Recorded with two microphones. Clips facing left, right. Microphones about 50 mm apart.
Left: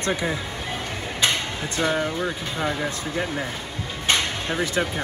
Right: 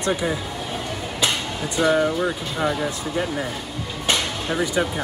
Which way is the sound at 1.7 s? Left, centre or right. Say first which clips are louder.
Right 5 dB; right.